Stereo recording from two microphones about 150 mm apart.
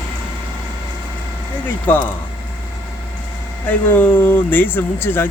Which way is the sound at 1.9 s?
10° left (ahead or behind).